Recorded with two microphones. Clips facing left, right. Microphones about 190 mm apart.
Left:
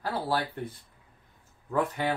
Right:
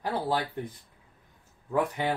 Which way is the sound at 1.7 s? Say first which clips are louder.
Right 1 dB; 15° right (ahead or behind).